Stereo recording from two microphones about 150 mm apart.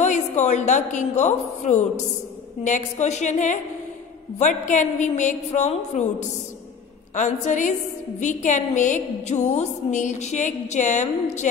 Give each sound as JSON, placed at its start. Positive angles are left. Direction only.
{"t": 0.0, "sound": "a woman's voice", "side_deg": 50}